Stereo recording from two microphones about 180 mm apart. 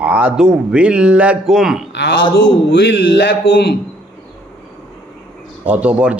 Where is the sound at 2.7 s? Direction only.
70° left (ahead or behind).